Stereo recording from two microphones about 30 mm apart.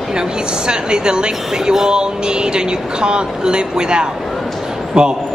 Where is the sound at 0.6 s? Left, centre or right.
Right.